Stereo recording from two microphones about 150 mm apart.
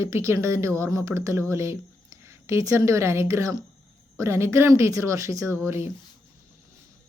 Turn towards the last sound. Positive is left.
turn(degrees=-15)  # may be behind; listen again after turning